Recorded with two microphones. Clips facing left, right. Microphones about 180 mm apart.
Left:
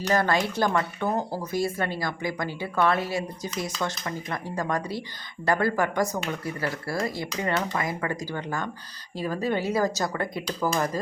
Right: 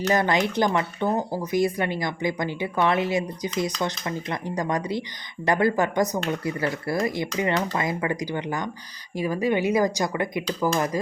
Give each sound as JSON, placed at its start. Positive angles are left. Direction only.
{"t": 0.1, "sound": "speech", "side_deg": -20}